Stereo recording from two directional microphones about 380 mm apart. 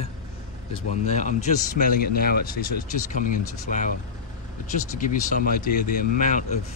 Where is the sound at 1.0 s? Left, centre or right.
Centre.